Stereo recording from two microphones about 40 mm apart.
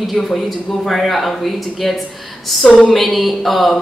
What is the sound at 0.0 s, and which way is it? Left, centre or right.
A woman's voice, centre.